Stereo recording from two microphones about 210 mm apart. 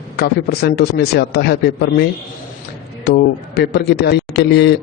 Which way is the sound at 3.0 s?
50° left (ahead or behind).